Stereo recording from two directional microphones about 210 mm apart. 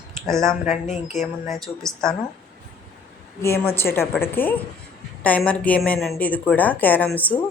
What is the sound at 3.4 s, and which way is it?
A woman's voice, 10° left (ahead or behind).